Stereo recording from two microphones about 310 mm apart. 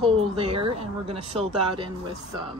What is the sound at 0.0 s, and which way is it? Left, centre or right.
Speech, centre.